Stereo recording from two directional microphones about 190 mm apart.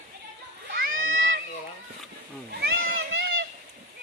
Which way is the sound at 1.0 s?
90° right.